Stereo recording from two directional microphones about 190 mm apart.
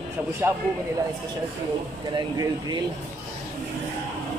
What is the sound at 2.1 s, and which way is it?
Speech, 25° right (ahead or behind).